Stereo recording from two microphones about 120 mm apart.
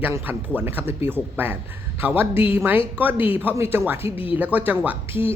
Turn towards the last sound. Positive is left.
turn(degrees=-20)  # may be behind; listen again after turning